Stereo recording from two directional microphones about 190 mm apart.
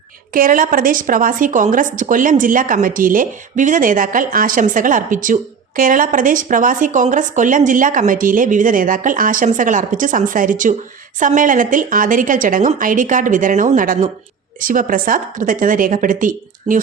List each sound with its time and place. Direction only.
0.3 s a woman's voice: 45° right (ahead or behind)